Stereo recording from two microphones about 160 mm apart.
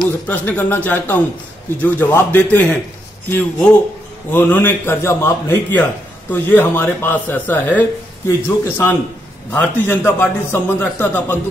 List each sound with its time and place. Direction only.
0.0 s a man's voice: 10° left (ahead or behind)